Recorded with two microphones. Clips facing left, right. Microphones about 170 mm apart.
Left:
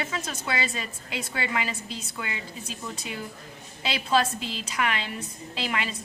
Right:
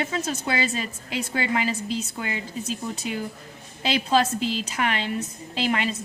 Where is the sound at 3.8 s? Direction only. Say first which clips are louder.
Right 3 dB; 40° right (ahead or behind).